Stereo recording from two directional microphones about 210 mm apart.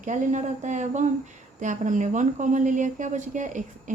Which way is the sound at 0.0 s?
35° right (ahead or behind).